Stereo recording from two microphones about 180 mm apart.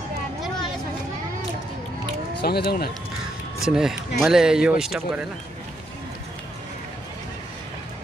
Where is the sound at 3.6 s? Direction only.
5° right (ahead or behind).